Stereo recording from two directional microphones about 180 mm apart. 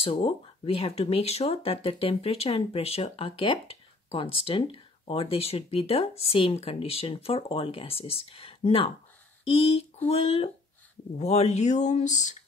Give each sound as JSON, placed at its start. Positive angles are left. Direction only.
{"t": 0.0, "sound": "speech", "side_deg": 35}